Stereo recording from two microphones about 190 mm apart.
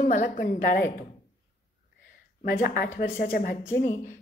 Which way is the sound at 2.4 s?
50° left (ahead or behind).